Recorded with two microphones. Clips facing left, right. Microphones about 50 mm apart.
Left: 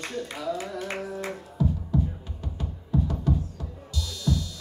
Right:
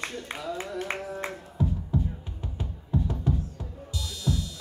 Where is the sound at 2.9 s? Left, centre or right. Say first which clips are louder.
Left 2 dB; centre.